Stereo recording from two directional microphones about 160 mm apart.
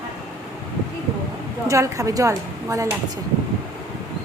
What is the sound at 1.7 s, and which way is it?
A woman's voice, 20° right (ahead or behind).